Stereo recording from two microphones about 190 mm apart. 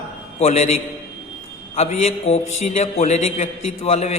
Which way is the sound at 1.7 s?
30° left (ahead or behind).